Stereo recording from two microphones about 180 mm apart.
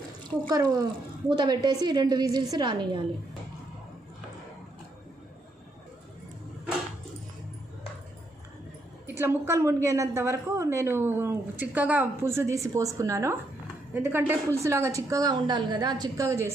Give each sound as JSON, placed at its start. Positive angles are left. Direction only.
{"t": 0.3, "sound": "a woman's voice", "side_deg": -20}
{"t": 9.0, "sound": "a woman's voice", "side_deg": -10}